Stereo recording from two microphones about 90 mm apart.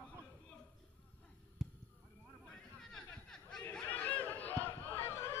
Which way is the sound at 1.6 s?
Centre (ahead or behind).